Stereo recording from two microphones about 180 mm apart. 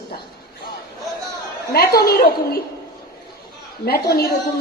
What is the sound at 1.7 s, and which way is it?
Speech, 60° left (ahead or behind).